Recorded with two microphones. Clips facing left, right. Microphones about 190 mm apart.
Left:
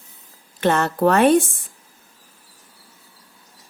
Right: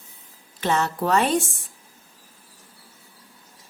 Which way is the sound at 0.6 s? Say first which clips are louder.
Left 6 dB; 55° left (ahead or behind).